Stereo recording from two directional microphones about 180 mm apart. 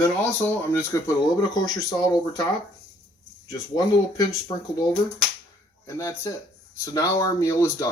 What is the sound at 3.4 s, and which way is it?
Speech, 20° left (ahead or behind).